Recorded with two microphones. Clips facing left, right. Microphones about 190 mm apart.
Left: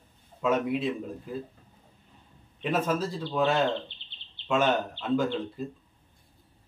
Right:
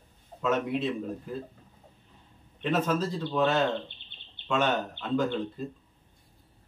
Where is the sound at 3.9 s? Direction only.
55° right (ahead or behind).